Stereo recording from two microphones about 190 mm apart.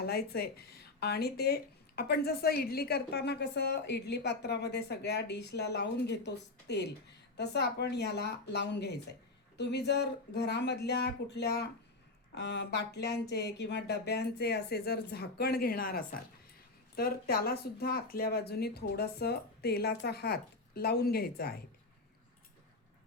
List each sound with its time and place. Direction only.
0.0 s a woman's voice: 55° left (ahead or behind)